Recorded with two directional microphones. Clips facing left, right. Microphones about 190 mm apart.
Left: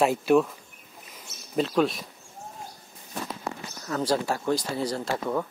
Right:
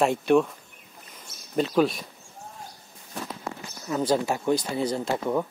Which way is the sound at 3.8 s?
15° right (ahead or behind).